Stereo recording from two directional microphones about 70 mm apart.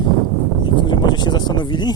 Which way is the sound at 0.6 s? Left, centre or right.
Left.